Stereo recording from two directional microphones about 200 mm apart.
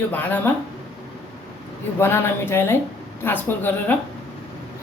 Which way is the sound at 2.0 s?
10° left (ahead or behind).